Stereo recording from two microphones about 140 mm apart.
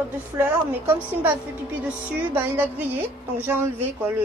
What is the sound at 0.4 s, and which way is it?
A woman's voice, 15° right (ahead or behind).